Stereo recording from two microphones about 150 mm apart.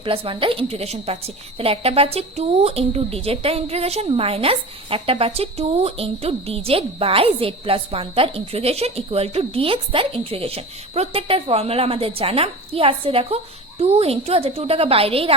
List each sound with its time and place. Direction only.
0.0 s a woman's voice: 35° right (ahead or behind)